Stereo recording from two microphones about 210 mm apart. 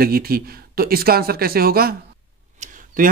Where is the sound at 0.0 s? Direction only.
45° right (ahead or behind).